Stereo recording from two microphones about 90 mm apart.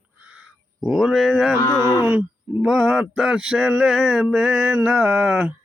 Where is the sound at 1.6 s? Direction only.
50° left (ahead or behind).